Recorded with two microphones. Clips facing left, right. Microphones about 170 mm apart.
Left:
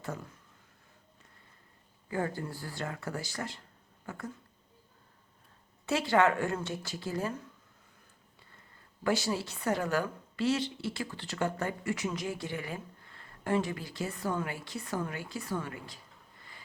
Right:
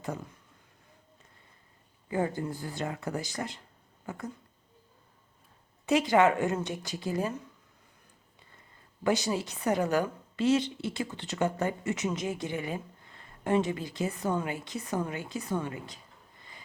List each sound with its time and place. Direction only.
2.0 s a woman's voice: 20° right (ahead or behind)
4.0 s a sound: 20° right (ahead or behind)
5.8 s speech: 15° right (ahead or behind)
9.0 s a woman's voice: 20° right (ahead or behind)